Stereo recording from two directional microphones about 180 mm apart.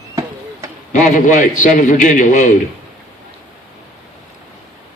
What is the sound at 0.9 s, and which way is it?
A man's voice, 45° left (ahead or behind).